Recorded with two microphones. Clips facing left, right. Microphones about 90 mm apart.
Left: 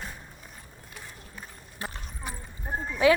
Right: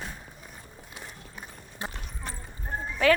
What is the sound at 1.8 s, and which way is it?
Clip-clop, 20° right (ahead or behind).